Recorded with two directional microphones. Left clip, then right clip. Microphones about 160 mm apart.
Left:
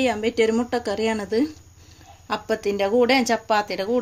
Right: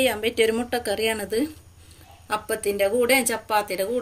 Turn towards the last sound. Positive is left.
turn(degrees=60)  # may be behind; listen again after turning